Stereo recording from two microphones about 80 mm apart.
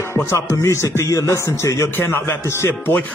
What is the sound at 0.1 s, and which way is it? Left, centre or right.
A man's voice, left.